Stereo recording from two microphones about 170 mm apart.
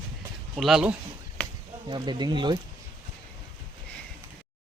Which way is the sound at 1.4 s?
5° left (ahead or behind).